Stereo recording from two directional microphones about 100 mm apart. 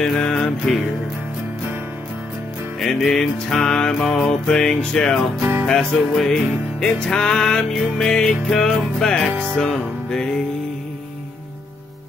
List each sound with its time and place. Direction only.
0.0 s music: 5° left (ahead or behind)
2.8 s music: centre (ahead or behind)
5.4 s music: 20° right (ahead or behind)
5.7 s music: 5° left (ahead or behind)